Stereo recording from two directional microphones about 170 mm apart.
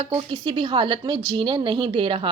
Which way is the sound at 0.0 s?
30° right (ahead or behind).